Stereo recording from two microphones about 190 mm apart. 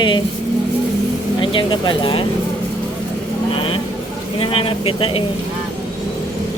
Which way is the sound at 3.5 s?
30° left (ahead or behind).